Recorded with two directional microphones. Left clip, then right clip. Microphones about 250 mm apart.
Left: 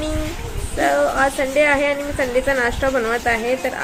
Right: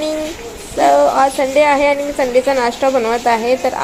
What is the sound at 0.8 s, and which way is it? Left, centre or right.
A woman's voice, centre.